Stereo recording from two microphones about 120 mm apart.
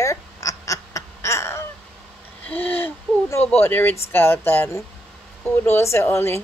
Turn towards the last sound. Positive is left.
turn(degrees=20)  # may be behind; listen again after turning